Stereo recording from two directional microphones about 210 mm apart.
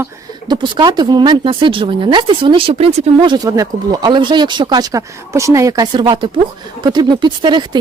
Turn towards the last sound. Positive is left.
turn(degrees=-20)  # may be behind; listen again after turning